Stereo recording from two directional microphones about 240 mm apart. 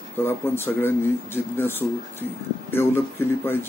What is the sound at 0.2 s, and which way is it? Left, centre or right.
Speech, centre.